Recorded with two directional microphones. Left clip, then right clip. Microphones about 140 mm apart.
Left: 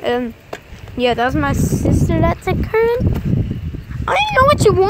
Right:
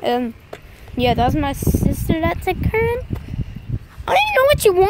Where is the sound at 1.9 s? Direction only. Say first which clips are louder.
Left 5 dB; 25° right (ahead or behind).